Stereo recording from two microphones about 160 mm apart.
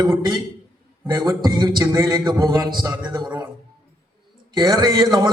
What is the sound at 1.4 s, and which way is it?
A man's voice, 25° right (ahead or behind).